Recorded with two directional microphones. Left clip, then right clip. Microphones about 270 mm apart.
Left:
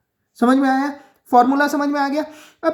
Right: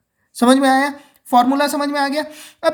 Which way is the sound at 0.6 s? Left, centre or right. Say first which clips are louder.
Right 4 dB; right.